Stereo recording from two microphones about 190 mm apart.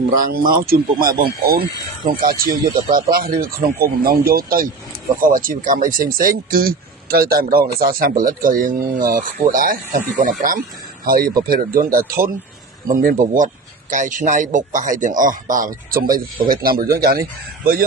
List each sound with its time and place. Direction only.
0.1 s speech: 50° right (ahead or behind)